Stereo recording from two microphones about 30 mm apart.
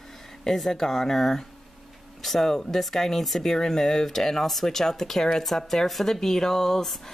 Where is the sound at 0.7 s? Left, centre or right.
Centre.